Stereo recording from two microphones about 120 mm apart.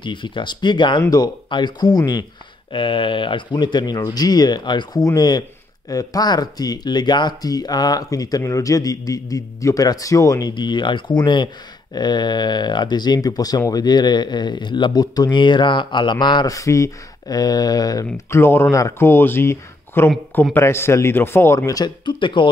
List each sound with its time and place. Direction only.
0.0 s speech: 40° left (ahead or behind)
2.7 s speech: 45° left (ahead or behind)
18.1 s speech: 20° left (ahead or behind); by 22.5 s 40° left (ahead or behind)